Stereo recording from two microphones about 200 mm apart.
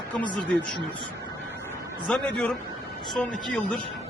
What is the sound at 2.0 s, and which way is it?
Speech, 5° left (ahead or behind).